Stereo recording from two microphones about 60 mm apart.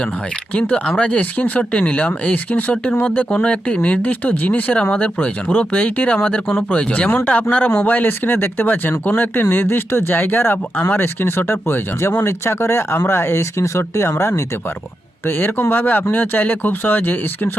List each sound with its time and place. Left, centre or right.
0.9 s speech: centre; by 14.4 s left
15.3 s speech: left